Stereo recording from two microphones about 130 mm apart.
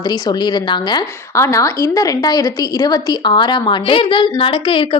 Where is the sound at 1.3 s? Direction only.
25° left (ahead or behind).